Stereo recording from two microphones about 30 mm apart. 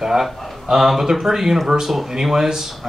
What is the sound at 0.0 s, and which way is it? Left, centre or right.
Speech, centre.